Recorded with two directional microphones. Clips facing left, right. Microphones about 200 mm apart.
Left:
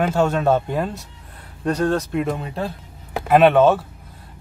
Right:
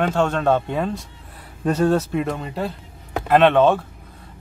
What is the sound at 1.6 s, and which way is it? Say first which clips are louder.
Speech: right 2 dB; 10° right (ahead or behind).